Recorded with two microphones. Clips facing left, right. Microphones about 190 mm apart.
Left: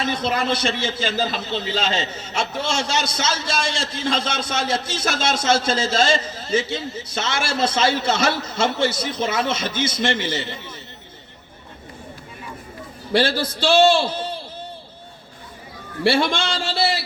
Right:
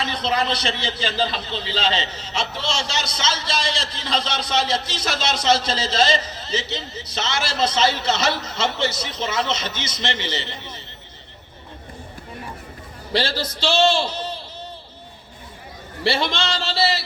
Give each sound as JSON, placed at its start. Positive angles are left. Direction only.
{"t": 0.0, "sound": "a man's voice", "side_deg": 50}
{"t": 13.6, "sound": "a man's voice", "side_deg": 55}
{"t": 16.0, "sound": "a man's voice", "side_deg": 55}